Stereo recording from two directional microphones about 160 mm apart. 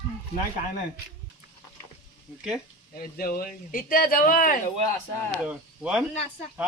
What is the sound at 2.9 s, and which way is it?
Speech, 65° left (ahead or behind).